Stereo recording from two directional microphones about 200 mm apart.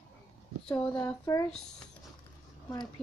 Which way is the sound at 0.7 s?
20° left (ahead or behind).